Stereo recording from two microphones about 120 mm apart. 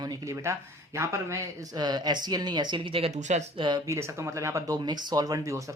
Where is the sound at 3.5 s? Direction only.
40° right (ahead or behind).